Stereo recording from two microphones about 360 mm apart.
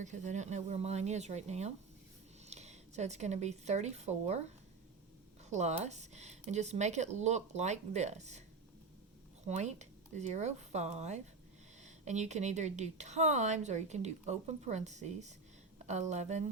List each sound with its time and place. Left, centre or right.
0.0 s a woman's voice: centre
5.5 s a woman's voice: centre
9.5 s a woman's voice: centre